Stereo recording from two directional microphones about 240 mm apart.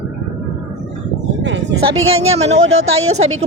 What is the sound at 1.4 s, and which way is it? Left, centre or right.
Speech, right.